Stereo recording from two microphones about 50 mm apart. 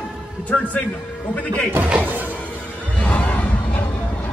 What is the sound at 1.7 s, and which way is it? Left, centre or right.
Speech, right.